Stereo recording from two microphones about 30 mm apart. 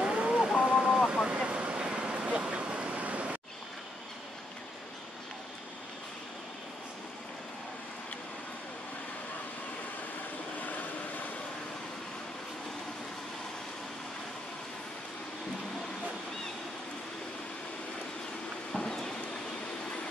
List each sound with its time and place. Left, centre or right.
0.0 s a sound: right
0.6 s a sound: centre
1.0 s vehicle: right
1.3 s vehicle: right
10.6 s vehicle: left
18.7 s rain: left